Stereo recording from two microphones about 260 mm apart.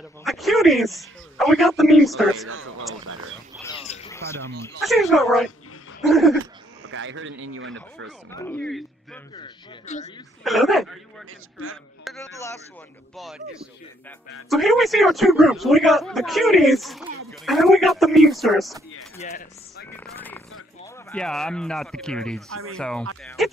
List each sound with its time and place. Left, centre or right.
0.2 s a man's voice: centre
2.4 s a man's voice: right
3.6 s bird: left
4.1 s speech: centre
4.6 s a man's voice: centre
6.4 s speech: right
8.3 s a man's voice: centre
9.3 s a man's voice: left
10.4 s a man's voice: centre
12.2 s speech: centre
13.1 s a man's voice: centre
19.1 s speech: left
20.2 s a man's voice: centre